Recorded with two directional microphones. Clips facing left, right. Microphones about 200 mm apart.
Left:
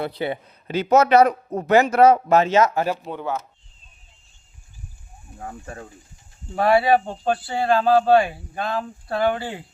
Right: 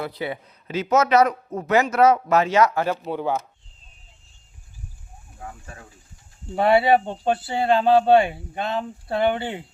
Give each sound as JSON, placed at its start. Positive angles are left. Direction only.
{"t": 0.0, "sound": "a man's voice", "side_deg": 30}
{"t": 3.1, "sound": "speech", "side_deg": -10}
{"t": 5.4, "sound": "speech", "side_deg": 40}
{"t": 6.6, "sound": "speech", "side_deg": -25}